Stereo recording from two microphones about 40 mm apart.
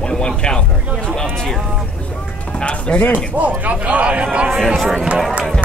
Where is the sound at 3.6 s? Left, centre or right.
Right.